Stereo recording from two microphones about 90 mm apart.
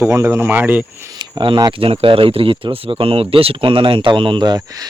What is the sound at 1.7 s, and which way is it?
Speech, 80° right.